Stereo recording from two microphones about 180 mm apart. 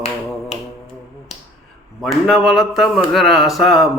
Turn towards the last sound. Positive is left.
turn(degrees=0)  # may be behind; listen again after turning